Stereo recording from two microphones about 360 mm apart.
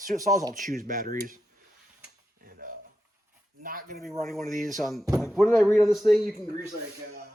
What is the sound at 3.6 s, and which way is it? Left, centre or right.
Speech, right.